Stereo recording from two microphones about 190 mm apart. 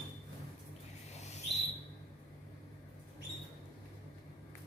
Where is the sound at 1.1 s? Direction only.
35° left (ahead or behind).